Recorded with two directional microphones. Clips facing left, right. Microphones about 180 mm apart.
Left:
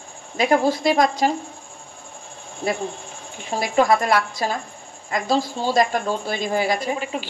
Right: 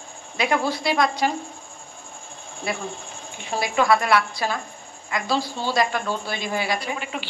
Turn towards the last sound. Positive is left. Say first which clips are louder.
# left 4 dB
turn(degrees=35)  # may be behind; listen again after turning